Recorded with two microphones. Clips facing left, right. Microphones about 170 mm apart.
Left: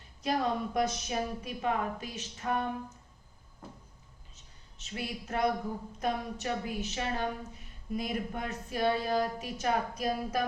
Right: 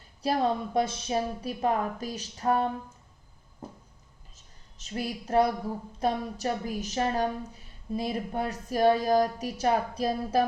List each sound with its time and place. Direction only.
0.2 s a woman's voice: 30° right (ahead or behind)
4.8 s a woman's voice: 40° right (ahead or behind)